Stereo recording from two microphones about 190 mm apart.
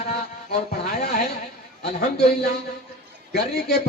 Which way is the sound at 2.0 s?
55° left (ahead or behind).